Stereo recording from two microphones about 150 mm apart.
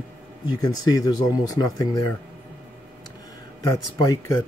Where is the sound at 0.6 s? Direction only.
25° left (ahead or behind).